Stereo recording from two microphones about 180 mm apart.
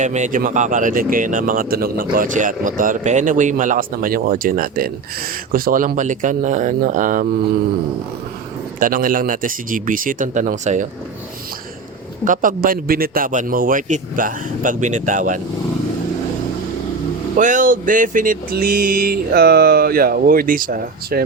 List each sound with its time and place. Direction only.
0.0 s speech: 40° right (ahead or behind)
8.8 s speech: 50° right (ahead or behind)
12.2 s speech: 50° right (ahead or behind)
17.3 s speech: 45° right (ahead or behind)